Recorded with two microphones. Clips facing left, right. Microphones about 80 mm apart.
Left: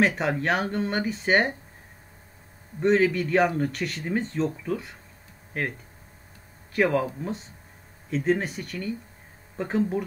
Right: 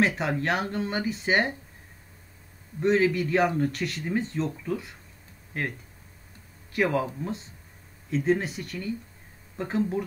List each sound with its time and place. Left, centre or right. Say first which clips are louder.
0.0 s speech: left 2 dB; centre
2.8 s speech: left 1 dB; centre
6.7 s speech: left 2 dB; centre
8.1 s speech: even; centre